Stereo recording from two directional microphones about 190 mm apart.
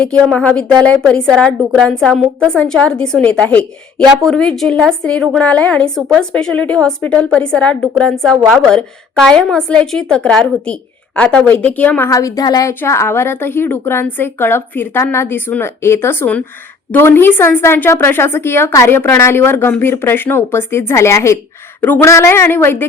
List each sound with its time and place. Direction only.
0.3 s a woman's voice: 5° left (ahead or behind)